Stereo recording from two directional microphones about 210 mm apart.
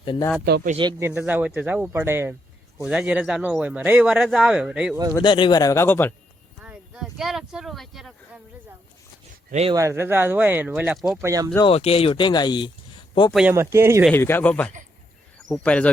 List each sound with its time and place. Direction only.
0.0 s a man's voice: 25° left (ahead or behind)
0.4 s speech: 50° right (ahead or behind)
0.8 s speech: 15° right (ahead or behind)
5.1 s speech: 20° left (ahead or behind)
6.6 s speech: 5° right (ahead or behind)
9.5 s speech: 30° right (ahead or behind)
9.7 s speech: 15° right (ahead or behind)
11.2 s speech: 15° right (ahead or behind)
11.5 s speech: 25° left (ahead or behind)
13.3 s speech: 10° right (ahead or behind)
14.1 s speech: 10° left (ahead or behind)